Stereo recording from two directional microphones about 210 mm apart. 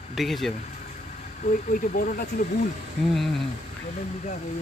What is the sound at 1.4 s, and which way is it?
Speech, 40° left (ahead or behind).